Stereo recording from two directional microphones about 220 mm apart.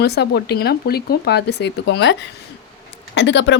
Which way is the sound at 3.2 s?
55° left (ahead or behind).